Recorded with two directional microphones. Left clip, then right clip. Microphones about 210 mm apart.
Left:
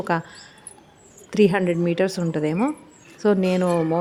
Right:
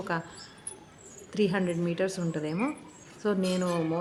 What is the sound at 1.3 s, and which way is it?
Speech, 35° left (ahead or behind).